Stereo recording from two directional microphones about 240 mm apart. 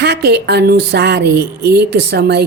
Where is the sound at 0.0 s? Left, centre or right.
Right.